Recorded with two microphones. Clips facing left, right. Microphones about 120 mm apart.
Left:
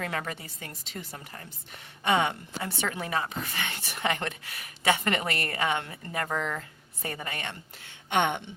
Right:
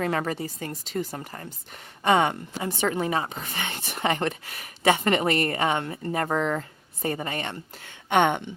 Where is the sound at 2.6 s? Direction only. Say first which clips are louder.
Right 7 dB; 25° right (ahead or behind).